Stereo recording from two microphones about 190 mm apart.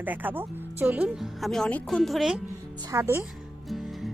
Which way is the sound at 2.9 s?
10° right (ahead or behind).